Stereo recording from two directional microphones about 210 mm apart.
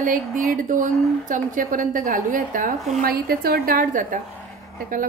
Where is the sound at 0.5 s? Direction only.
40° right (ahead or behind).